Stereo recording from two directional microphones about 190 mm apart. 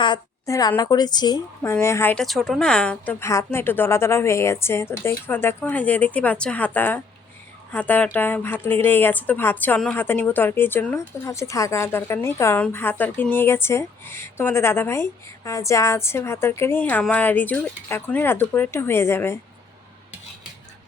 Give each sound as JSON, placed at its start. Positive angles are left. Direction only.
{"t": 0.0, "sound": "a woman's voice", "side_deg": 20}